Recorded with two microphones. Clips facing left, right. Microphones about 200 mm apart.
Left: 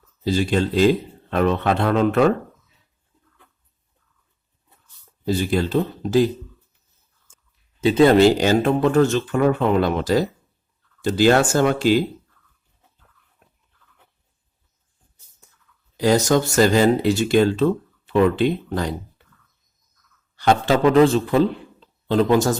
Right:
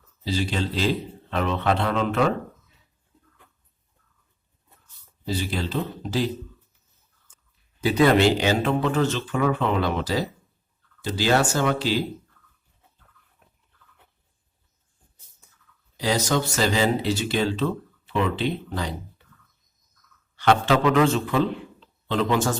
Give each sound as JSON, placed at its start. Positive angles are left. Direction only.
{"t": 0.3, "sound": "speech", "side_deg": 50}
{"t": 5.2, "sound": "speech", "side_deg": 50}
{"t": 7.8, "sound": "speech", "side_deg": 25}
{"t": 8.2, "sound": "speech", "side_deg": 45}
{"t": 16.0, "sound": "speech", "side_deg": 50}
{"t": 20.3, "sound": "a man's voice", "side_deg": 40}